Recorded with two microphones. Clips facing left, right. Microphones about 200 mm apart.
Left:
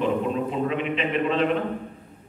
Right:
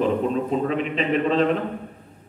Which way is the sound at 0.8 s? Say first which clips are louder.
Right 2 dB; 35° right (ahead or behind).